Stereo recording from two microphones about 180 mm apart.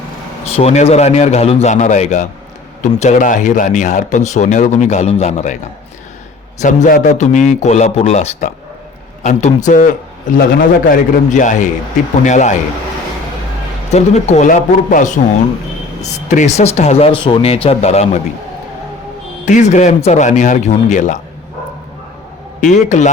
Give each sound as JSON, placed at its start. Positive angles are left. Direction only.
{"t": 0.4, "sound": "a man's voice", "side_deg": 35}
{"t": 6.6, "sound": "a man's voice", "side_deg": 45}
{"t": 13.9, "sound": "a man's voice", "side_deg": 40}
{"t": 19.5, "sound": "a man's voice", "side_deg": 45}
{"t": 22.7, "sound": "a man's voice", "side_deg": 40}